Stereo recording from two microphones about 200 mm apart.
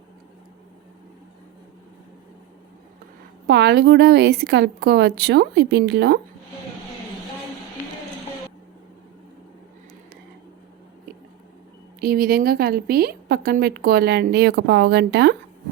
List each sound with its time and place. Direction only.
3.4 s a woman's voice: 55° right (ahead or behind)
11.9 s a woman's voice: 50° right (ahead or behind)